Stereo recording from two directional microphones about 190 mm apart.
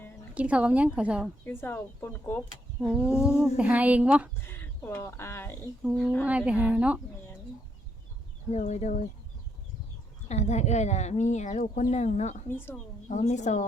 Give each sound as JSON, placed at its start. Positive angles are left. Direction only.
{"t": 0.3, "sound": "a woman's voice", "side_deg": -5}
{"t": 1.5, "sound": "speech", "side_deg": 10}
{"t": 2.8, "sound": "a woman's voice", "side_deg": -5}
{"t": 4.4, "sound": "speech", "side_deg": 10}
{"t": 5.8, "sound": "a woman's voice", "side_deg": 0}
{"t": 8.5, "sound": "speech", "side_deg": 35}
{"t": 10.2, "sound": "speech", "side_deg": 35}
{"t": 12.5, "sound": "speech", "side_deg": 10}
{"t": 13.1, "sound": "speech", "side_deg": 40}